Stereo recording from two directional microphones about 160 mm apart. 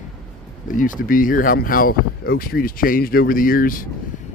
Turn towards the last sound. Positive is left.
turn(degrees=60)  # may be behind; listen again after turning